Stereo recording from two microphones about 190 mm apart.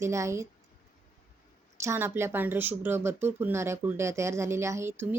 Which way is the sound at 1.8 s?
15° right (ahead or behind).